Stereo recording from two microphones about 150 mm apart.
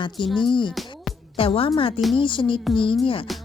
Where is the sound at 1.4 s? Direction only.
40° left (ahead or behind).